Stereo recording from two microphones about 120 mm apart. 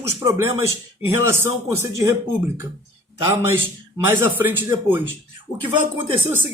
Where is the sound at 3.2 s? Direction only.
25° right (ahead or behind).